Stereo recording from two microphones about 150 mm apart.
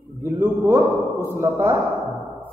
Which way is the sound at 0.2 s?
20° right (ahead or behind).